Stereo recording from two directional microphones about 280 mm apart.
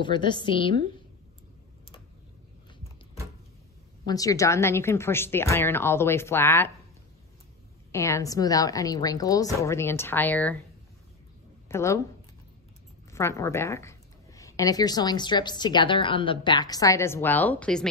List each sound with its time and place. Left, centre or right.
0.0 s speech: centre
4.0 s speech: centre
7.9 s speech: centre
11.7 s speech: centre
13.1 s speech: centre